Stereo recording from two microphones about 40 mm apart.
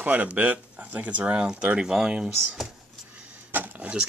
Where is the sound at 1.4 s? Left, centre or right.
Right.